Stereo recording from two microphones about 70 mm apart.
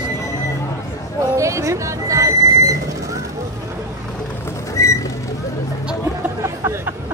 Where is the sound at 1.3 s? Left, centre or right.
Right.